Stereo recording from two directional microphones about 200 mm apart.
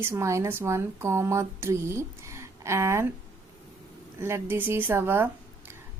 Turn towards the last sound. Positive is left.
turn(degrees=-10)  # may be behind; listen again after turning